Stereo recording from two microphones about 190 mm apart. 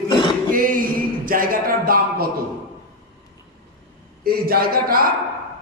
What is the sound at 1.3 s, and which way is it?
Speech, 50° right (ahead or behind).